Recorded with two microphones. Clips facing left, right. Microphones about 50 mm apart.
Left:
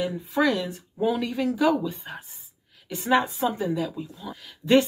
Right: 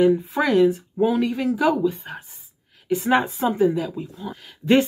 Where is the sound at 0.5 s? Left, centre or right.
Right.